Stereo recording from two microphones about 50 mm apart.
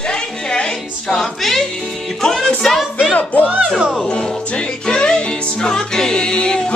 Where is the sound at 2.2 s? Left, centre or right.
Centre.